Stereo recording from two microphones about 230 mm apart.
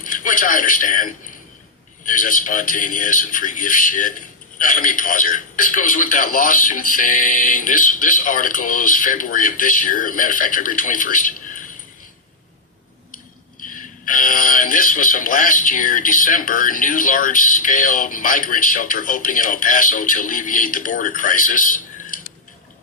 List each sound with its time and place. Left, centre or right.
0.0 s a man's voice: left
13.7 s speech: left